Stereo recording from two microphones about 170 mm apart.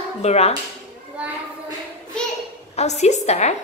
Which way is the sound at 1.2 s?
5° right (ahead or behind).